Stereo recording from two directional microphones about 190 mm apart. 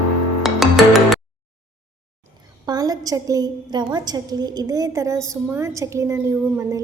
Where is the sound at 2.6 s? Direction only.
20° right (ahead or behind).